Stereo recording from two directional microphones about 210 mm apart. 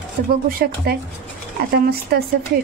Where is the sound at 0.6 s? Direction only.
45° right (ahead or behind).